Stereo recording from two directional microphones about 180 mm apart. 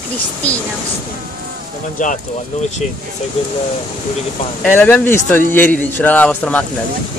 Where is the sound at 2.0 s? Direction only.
45° left (ahead or behind).